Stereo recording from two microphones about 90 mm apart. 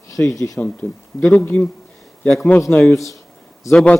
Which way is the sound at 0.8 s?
30° left (ahead or behind).